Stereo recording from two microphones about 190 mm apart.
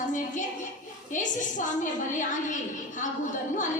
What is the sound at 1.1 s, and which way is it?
A woman's voice, 40° left (ahead or behind).